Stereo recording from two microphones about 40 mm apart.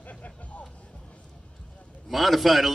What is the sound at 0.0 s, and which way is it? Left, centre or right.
Vehicle, left.